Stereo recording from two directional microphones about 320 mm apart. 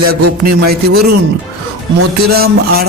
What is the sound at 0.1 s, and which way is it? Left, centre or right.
Mantra, right.